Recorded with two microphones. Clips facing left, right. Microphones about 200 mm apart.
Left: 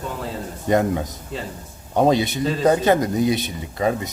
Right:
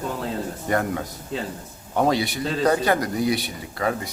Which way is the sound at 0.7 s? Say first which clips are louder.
Left 6 dB; 20° left (ahead or behind).